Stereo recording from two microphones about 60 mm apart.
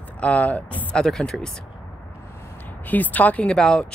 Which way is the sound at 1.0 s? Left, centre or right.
Centre.